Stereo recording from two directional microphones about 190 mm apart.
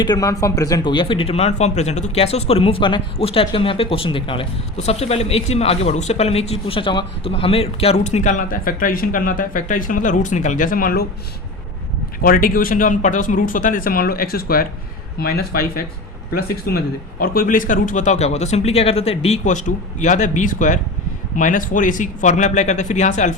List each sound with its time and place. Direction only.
0.0 s speech: 20° left (ahead or behind); by 11.0 s 50° left (ahead or behind)
12.2 s speech: 50° left (ahead or behind)